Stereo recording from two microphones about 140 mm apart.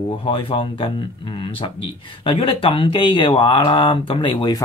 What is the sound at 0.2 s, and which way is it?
Speech, 40° left (ahead or behind).